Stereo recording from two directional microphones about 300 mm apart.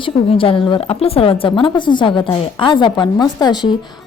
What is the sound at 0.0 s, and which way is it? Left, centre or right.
Speech, centre.